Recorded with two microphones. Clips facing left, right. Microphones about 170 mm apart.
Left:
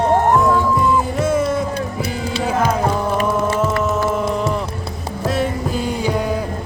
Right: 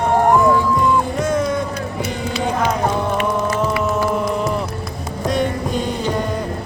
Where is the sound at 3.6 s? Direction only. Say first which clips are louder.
Left 1 dB; centre (ahead or behind).